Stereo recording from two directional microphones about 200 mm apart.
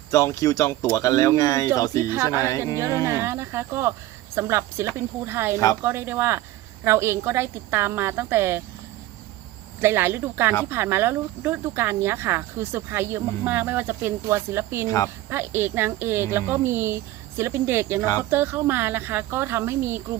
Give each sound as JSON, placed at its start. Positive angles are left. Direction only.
{"t": 0.1, "sound": "speech", "side_deg": 15}
{"t": 2.0, "sound": "speech", "side_deg": -10}
{"t": 2.4, "sound": "speech", "side_deg": 15}
{"t": 2.8, "sound": "speech", "side_deg": -15}
{"t": 9.8, "sound": "speech", "side_deg": -10}
{"t": 14.8, "sound": "speech", "side_deg": 15}
{"t": 15.3, "sound": "speech", "side_deg": -10}
{"t": 18.0, "sound": "speech", "side_deg": 15}
{"t": 18.3, "sound": "speech", "side_deg": -10}